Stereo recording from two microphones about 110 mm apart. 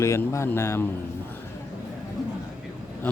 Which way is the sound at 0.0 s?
25° left (ahead or behind).